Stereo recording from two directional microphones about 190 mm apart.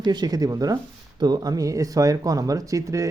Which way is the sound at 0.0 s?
20° right (ahead or behind).